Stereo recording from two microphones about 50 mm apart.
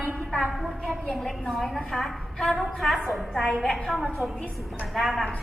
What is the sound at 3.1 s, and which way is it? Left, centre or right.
A woman's voice, centre.